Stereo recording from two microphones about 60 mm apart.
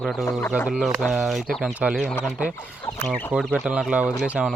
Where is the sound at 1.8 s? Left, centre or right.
Centre.